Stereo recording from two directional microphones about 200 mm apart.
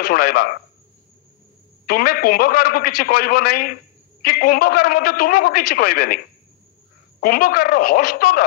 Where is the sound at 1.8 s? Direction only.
50° left (ahead or behind).